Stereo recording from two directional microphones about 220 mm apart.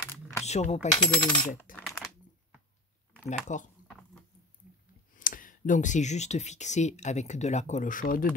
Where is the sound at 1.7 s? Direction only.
Centre (ahead or behind).